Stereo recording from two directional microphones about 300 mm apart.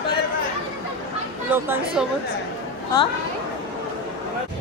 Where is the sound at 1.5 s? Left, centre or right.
Centre.